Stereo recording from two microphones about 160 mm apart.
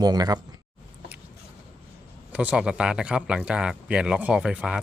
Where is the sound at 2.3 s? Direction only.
10° right (ahead or behind).